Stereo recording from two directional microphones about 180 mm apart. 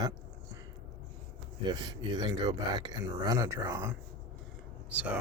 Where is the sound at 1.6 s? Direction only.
25° right (ahead or behind).